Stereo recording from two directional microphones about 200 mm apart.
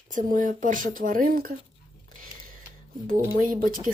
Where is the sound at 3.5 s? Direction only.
45° right (ahead or behind).